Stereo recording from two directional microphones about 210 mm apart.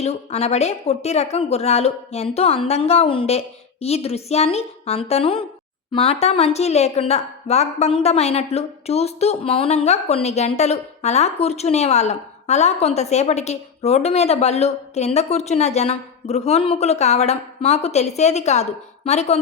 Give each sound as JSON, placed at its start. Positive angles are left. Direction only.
{"t": 0.0, "sound": "a woman's voice", "side_deg": 30}